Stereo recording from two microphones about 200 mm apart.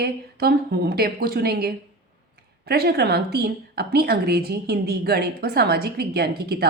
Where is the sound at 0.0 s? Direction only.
50° right (ahead or behind).